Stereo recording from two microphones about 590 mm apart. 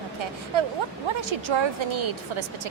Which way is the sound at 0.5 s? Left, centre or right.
Right.